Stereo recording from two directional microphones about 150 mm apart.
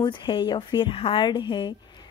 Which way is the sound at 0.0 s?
30° left (ahead or behind).